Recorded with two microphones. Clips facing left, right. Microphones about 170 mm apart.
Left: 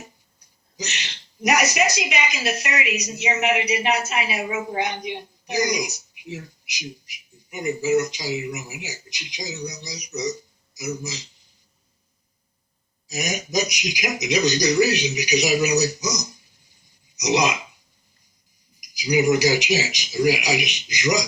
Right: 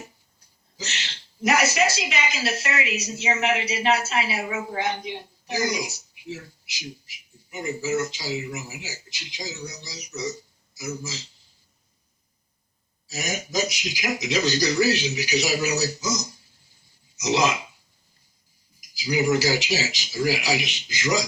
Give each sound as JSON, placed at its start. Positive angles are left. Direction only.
{"t": 0.8, "sound": "a woman's voice", "side_deg": 15}
{"t": 13.1, "sound": "a woman's voice", "side_deg": 15}
{"t": 18.8, "sound": "a woman's voice", "side_deg": 15}